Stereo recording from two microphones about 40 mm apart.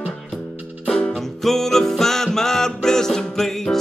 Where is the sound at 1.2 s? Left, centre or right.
Centre.